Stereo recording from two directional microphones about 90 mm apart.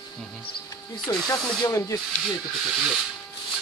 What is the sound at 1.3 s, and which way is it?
Speech, 40° left (ahead or behind).